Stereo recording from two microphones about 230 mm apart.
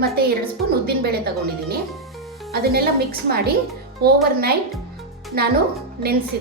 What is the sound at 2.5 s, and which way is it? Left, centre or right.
A woman's voice, right.